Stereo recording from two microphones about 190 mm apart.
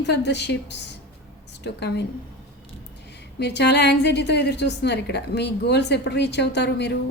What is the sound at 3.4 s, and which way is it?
A woman's voice, 65° left (ahead or behind).